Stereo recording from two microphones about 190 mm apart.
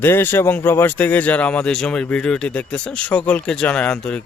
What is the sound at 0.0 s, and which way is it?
A man's voice, 10° left (ahead or behind).